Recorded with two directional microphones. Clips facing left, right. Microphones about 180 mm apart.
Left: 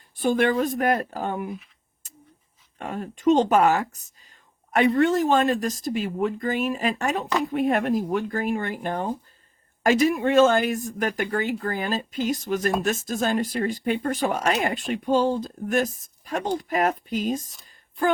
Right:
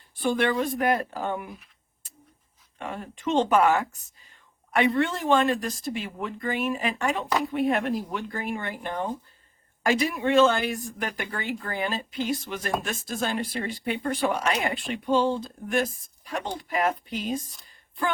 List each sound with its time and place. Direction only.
0.2 s speech: 45° left (ahead or behind)
1.5 s speech: centre (ahead or behind)
2.7 s speech: 45° left (ahead or behind)
3.5 s a sound: 40° left (ahead or behind)
4.9 s speech: 40° left (ahead or behind)